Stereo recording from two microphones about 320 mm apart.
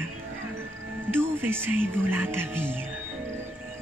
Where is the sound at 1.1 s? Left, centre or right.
Centre.